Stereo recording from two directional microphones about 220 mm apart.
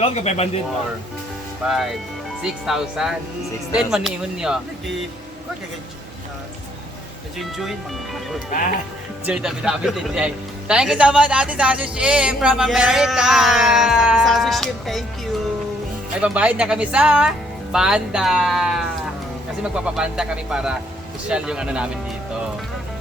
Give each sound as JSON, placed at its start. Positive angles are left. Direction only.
{"t": 0.0, "sound": "speech", "side_deg": 30}
{"t": 1.6, "sound": "speech", "side_deg": 0}
{"t": 7.3, "sound": "speech", "side_deg": 0}
{"t": 9.2, "sound": "speech", "side_deg": -5}
{"t": 16.2, "sound": "speech", "side_deg": -5}